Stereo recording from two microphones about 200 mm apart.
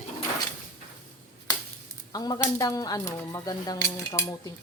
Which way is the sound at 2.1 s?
20° left (ahead or behind).